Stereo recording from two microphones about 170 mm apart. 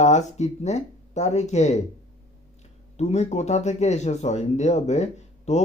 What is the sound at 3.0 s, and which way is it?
Speech, 40° left (ahead or behind).